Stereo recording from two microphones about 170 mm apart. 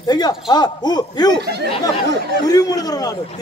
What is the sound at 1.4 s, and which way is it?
Speech, 75° right (ahead or behind).